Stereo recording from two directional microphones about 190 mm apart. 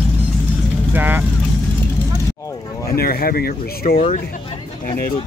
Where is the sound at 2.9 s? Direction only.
55° left (ahead or behind).